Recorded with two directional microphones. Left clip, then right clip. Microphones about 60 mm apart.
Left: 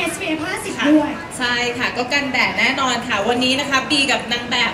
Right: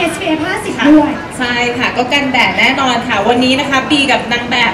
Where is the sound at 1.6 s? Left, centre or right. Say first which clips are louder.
Right 7 dB; left.